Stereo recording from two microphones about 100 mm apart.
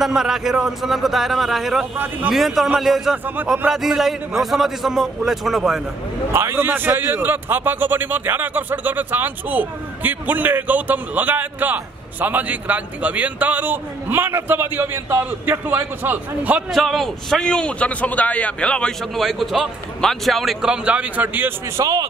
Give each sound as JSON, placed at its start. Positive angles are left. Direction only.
{"t": 0.0, "sound": "a man's voice", "side_deg": -5}
{"t": 2.0, "sound": "a man's voice", "side_deg": -20}
{"t": 2.3, "sound": "a man's voice", "side_deg": 0}
{"t": 6.3, "sound": "a man's voice", "side_deg": -25}
{"t": 16.7, "sound": "a man's voice", "side_deg": 0}
{"t": 21.7, "sound": "a man's voice", "side_deg": -40}